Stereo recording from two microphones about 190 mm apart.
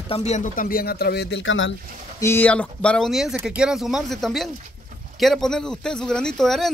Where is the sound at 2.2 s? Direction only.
10° left (ahead or behind).